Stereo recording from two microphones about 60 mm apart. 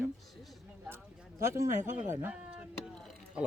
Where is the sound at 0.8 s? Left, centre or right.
Right.